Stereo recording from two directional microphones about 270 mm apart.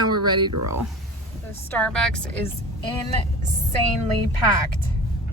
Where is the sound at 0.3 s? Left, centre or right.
Centre.